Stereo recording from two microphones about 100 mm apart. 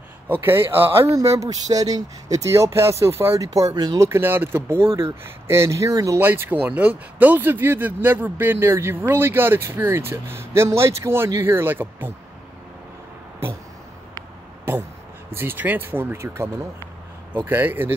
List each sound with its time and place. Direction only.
0.3 s speech: 20° right (ahead or behind); by 4.0 s 40° right (ahead or behind)
4.0 s speech: 25° right (ahead or behind)
6.1 s speech: 20° right (ahead or behind)
15.3 s speech: 20° right (ahead or behind)